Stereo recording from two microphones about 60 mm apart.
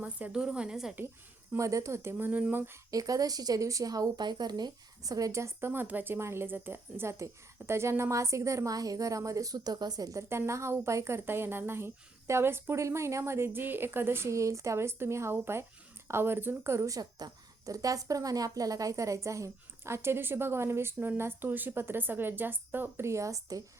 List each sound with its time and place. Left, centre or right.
0.3 s a woman's voice: centre
1.5 s a woman's voice: right
2.9 s a woman's voice: right
5.3 s speech: right
6.1 s a woman's voice: right
10.2 s a woman's voice: right
12.8 s a woman's voice: right
16.9 s speech: right
17.7 s a woman's voice: right
23.0 s speech: right